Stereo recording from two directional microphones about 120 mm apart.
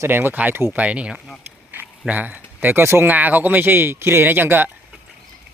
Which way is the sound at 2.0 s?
15° right (ahead or behind).